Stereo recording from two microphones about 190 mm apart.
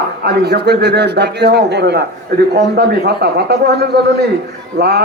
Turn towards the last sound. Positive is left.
turn(degrees=-60)  # may be behind; listen again after turning